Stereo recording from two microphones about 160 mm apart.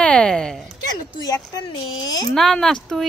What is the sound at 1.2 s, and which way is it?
Speech, 25° left (ahead or behind).